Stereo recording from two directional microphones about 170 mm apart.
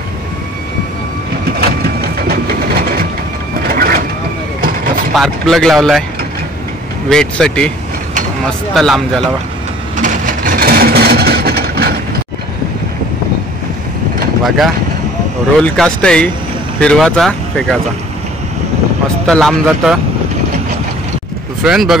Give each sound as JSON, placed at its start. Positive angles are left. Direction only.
{"t": 1.6, "sound": "printer", "side_deg": -65}
{"t": 3.6, "sound": "vehicle", "side_deg": -60}
{"t": 5.1, "sound": "speech", "side_deg": 0}
{"t": 7.1, "sound": "speech", "side_deg": 5}
{"t": 10.0, "sound": "vehicle", "side_deg": -55}
{"t": 15.6, "sound": "speech", "side_deg": 5}
{"t": 19.2, "sound": "speech", "side_deg": 0}
{"t": 21.6, "sound": "speech", "side_deg": -5}